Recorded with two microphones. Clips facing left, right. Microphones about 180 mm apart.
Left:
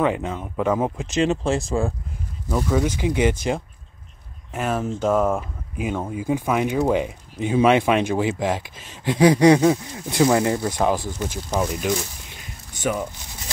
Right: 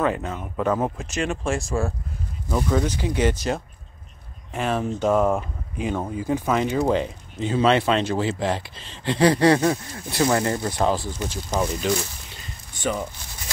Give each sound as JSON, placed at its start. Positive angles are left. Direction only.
{"t": 0.0, "sound": "speech", "side_deg": 15}
{"t": 1.1, "sound": "speech", "side_deg": 20}